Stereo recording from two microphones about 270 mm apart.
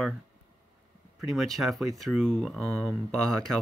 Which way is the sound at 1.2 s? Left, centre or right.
Centre.